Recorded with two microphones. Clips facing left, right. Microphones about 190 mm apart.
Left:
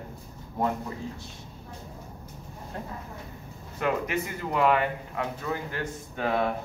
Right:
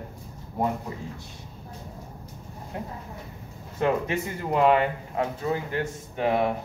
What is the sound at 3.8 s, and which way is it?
A man's voice, 25° right (ahead or behind).